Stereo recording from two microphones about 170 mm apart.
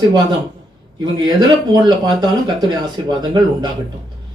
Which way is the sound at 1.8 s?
25° right (ahead or behind).